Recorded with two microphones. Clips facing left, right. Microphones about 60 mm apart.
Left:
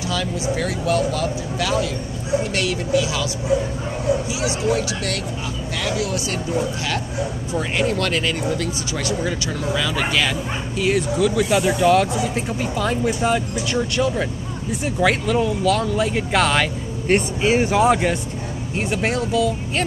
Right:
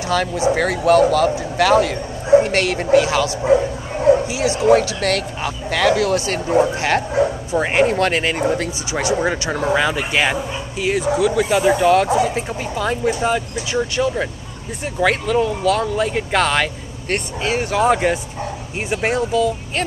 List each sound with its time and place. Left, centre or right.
0.1 s speech: right
10.8 s speech: centre
17.1 s speech: centre
17.7 s speech: centre